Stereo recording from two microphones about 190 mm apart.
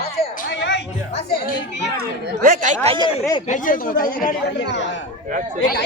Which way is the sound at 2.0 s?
45° right (ahead or behind).